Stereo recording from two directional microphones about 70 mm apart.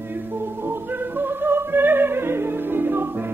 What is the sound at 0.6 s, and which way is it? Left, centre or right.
Music, right.